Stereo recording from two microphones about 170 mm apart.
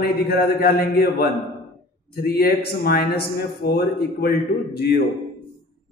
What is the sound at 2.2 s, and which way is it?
A man's voice, 65° left (ahead or behind).